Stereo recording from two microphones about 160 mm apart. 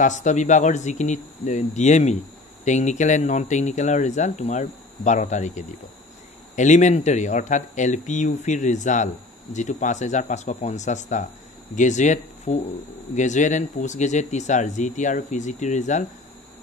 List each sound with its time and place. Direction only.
0.0 s speech: 50° left (ahead or behind)